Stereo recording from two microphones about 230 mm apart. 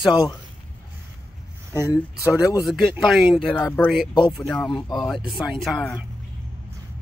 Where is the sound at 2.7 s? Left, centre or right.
Centre.